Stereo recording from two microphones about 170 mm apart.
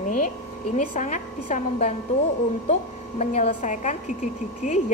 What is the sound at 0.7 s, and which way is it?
A woman's voice, 45° left (ahead or behind).